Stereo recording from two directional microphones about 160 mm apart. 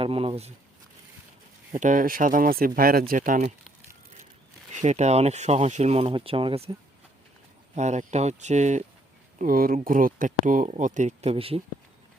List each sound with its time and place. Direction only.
0.0 s speech: 35° right (ahead or behind)
1.7 s speech: 50° right (ahead or behind)
4.7 s speech: 45° right (ahead or behind)
7.8 s speech: 45° right (ahead or behind)
9.4 s speech: 60° right (ahead or behind); by 11.6 s 35° right (ahead or behind)